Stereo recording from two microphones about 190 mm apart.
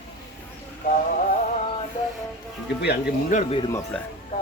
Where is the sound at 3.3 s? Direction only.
30° left (ahead or behind).